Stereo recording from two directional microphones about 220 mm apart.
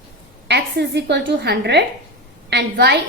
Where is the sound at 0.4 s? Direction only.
50° right (ahead or behind).